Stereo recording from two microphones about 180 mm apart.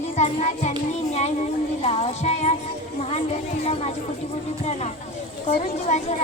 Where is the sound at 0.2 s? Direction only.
40° left (ahead or behind).